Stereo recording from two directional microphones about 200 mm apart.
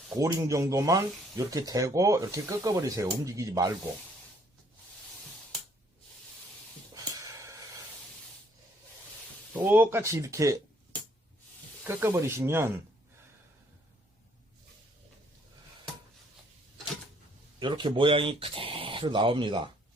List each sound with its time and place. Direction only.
0.1 s speech: 15° right (ahead or behind)
6.9 s a sound: 15° right (ahead or behind)
9.6 s speech: 10° right (ahead or behind)
11.9 s speech: 10° right (ahead or behind)
17.6 s speech: 25° right (ahead or behind)